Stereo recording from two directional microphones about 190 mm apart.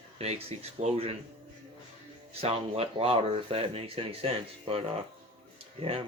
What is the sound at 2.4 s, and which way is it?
Speech, 30° right (ahead or behind).